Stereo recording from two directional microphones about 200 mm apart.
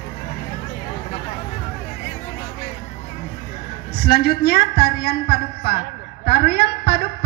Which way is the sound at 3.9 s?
55° left (ahead or behind).